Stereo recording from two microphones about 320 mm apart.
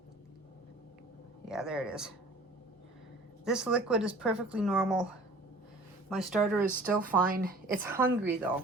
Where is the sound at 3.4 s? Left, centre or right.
Centre.